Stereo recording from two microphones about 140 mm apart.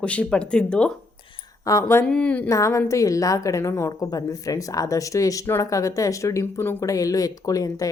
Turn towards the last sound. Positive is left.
turn(degrees=25)  # may be behind; listen again after turning